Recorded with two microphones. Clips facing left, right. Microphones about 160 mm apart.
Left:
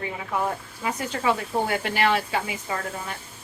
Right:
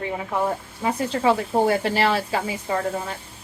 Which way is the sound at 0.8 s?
30° right (ahead or behind).